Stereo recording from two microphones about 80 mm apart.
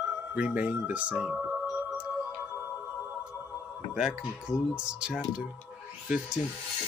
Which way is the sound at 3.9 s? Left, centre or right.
Centre.